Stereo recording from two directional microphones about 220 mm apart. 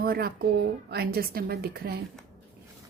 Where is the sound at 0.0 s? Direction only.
45° right (ahead or behind).